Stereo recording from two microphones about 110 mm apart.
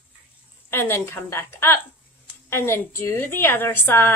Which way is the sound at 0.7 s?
20° left (ahead or behind).